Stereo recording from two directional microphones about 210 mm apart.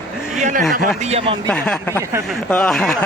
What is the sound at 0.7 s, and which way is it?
Speech, 30° right (ahead or behind).